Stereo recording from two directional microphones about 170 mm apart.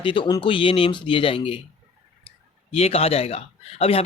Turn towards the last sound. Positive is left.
turn(degrees=35)  # may be behind; listen again after turning